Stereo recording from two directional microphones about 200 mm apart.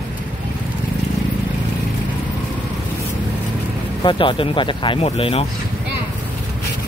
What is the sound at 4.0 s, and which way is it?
Speech, 25° left (ahead or behind).